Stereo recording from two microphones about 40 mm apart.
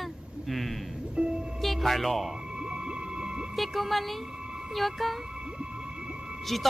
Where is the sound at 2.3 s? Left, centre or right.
Right.